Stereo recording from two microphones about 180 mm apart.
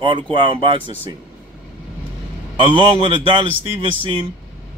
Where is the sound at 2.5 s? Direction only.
25° right (ahead or behind).